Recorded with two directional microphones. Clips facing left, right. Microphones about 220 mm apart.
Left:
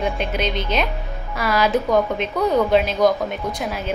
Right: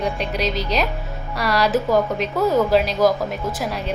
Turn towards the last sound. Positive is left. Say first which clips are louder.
# even
turn(degrees=0)  # may be behind; listen again after turning